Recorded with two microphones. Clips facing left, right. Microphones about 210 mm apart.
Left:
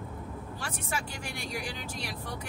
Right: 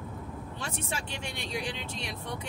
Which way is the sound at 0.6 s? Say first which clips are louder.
Even; 25° right (ahead or behind).